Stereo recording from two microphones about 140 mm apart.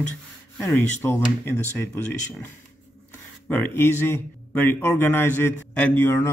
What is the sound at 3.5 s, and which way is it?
A man's voice, 15° left (ahead or behind).